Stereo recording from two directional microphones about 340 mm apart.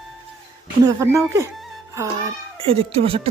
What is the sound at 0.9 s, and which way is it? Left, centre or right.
Speech, centre.